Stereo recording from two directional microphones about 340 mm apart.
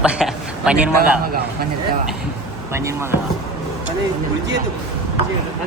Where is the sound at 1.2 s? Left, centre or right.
Right.